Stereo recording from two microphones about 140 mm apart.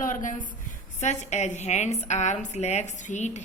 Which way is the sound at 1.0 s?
55° left (ahead or behind).